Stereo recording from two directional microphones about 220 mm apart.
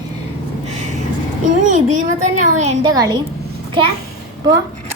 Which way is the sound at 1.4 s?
35° right (ahead or behind).